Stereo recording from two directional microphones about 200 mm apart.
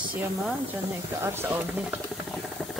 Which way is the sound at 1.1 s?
10° right (ahead or behind).